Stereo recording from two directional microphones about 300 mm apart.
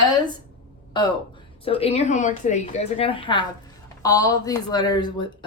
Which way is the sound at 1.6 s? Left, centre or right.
Centre.